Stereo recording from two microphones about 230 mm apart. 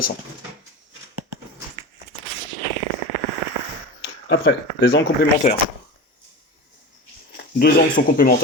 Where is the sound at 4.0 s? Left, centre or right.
Left.